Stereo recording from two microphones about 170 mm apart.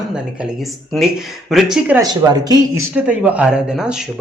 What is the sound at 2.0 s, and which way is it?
Speech, 25° right (ahead or behind).